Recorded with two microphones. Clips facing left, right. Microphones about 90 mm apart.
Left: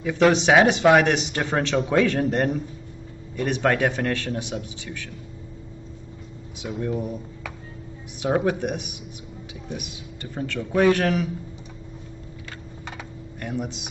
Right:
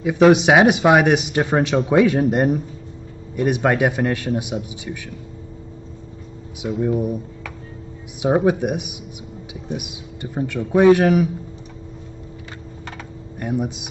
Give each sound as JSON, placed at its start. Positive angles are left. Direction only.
{"t": 0.0, "sound": "speech", "side_deg": -15}
{"t": 6.8, "sound": "speech", "side_deg": -15}
{"t": 8.2, "sound": "speech", "side_deg": -20}
{"t": 13.4, "sound": "speech", "side_deg": -15}